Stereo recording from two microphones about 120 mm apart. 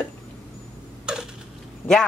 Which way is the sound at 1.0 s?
5° right (ahead or behind).